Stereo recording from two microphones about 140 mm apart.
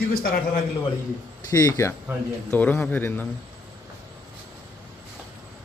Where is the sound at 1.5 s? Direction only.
20° left (ahead or behind).